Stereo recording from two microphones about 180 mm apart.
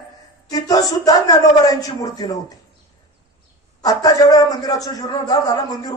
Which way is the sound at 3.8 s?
20° left (ahead or behind).